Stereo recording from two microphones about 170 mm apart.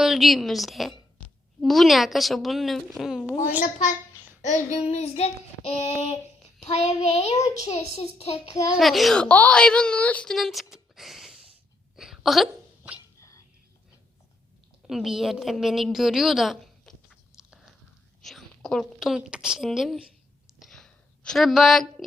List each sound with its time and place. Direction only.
0.0 s a woman's voice: centre (ahead or behind)
3.6 s a child's voice: 45° left (ahead or behind)
6.6 s a child's voice: 40° left (ahead or behind)
8.7 s a woman's voice: centre (ahead or behind)
11.9 s a sound: centre (ahead or behind)
14.8 s a woman's voice: centre (ahead or behind)
20.6 s a sound: centre (ahead or behind)